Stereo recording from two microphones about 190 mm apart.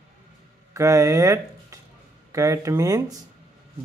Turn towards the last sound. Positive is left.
turn(degrees=-20)  # may be behind; listen again after turning